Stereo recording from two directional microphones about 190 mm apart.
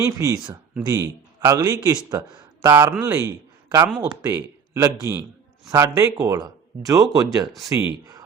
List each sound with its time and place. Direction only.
0.0 s a man's voice: 15° right (ahead or behind)
7.5 s speech: 5° right (ahead or behind)